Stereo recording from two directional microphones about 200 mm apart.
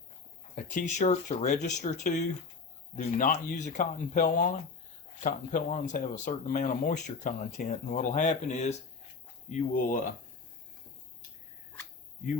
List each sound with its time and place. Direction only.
0.5 s speech: 40° left (ahead or behind)